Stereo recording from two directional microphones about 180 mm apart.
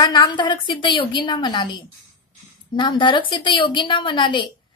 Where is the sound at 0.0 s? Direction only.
25° left (ahead or behind).